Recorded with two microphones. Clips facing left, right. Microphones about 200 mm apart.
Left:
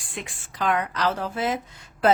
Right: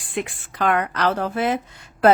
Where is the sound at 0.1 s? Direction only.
60° right (ahead or behind).